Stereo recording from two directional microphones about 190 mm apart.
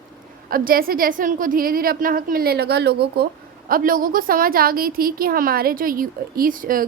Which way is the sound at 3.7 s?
45° right (ahead or behind).